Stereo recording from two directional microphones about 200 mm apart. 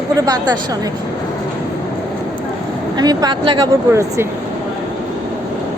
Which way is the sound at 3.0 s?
20° right (ahead or behind).